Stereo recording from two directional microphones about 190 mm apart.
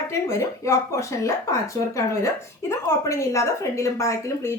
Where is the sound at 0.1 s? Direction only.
15° left (ahead or behind).